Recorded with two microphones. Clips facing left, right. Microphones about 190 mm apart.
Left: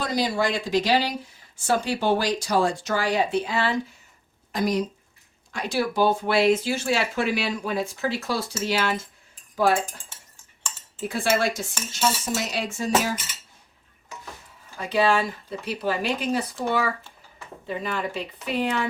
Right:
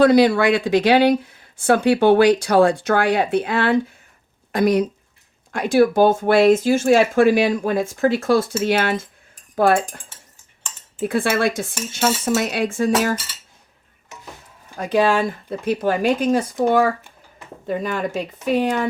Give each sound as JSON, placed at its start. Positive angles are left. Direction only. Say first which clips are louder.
{"t": 0.0, "sound": "speech", "louder": "right 11 dB", "side_deg": -65}
{"t": 11.0, "sound": "speech", "louder": "right 4 dB", "side_deg": -55}
{"t": 14.8, "sound": "speech", "louder": "right 4 dB", "side_deg": -50}
{"t": 17.7, "sound": "speech", "louder": "right 6 dB", "side_deg": -45}